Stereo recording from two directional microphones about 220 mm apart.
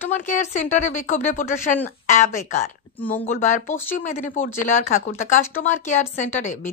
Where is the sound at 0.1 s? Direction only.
35° left (ahead or behind).